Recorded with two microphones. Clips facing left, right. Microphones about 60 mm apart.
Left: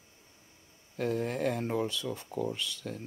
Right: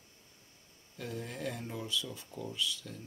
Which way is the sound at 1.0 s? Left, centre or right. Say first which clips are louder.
Left 9 dB; left.